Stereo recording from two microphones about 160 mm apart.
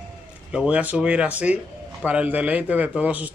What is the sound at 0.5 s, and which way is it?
A man's voice, 5° right (ahead or behind).